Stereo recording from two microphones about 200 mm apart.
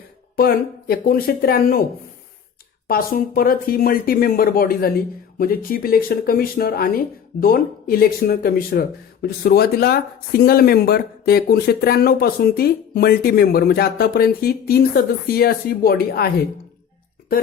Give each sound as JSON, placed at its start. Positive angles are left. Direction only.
{"t": 0.3, "sound": "speech", "side_deg": 50}
{"t": 2.8, "sound": "speech", "side_deg": 45}